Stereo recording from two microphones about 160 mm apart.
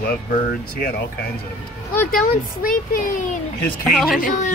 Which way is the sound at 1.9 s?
65° left (ahead or behind).